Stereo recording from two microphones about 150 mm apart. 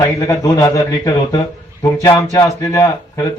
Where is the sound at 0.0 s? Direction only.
25° left (ahead or behind).